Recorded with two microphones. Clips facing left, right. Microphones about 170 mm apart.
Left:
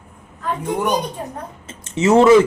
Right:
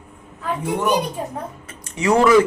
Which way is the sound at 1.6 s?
25° left (ahead or behind).